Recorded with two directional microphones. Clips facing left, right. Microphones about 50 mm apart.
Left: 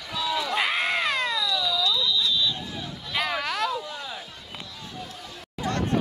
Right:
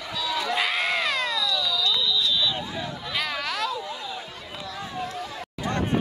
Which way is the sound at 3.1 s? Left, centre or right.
Centre.